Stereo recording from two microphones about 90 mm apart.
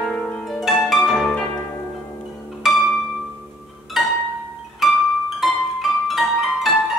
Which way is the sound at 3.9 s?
Centre (ahead or behind).